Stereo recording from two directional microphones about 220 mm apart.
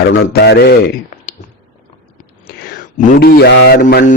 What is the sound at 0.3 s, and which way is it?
Mantra, 45° left (ahead or behind).